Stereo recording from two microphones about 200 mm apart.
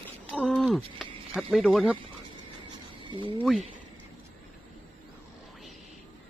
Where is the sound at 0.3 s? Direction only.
5° left (ahead or behind).